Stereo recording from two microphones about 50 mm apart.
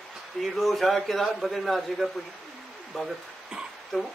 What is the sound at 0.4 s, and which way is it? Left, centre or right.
A man's voice, centre.